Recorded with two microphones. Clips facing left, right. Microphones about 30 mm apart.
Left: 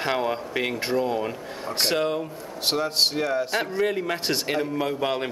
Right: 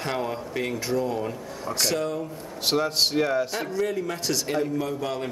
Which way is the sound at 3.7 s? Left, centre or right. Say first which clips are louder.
Even; left.